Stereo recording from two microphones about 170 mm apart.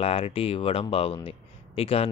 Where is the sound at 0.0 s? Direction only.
35° left (ahead or behind).